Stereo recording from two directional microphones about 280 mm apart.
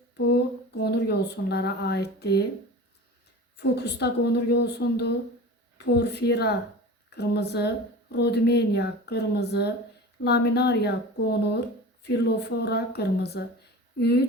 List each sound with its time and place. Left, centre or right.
0.8 s speech: left
3.6 s speech: left